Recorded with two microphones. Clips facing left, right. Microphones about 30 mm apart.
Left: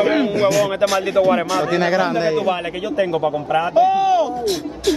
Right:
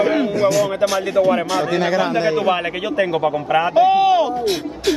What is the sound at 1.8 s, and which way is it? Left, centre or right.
Speech, left.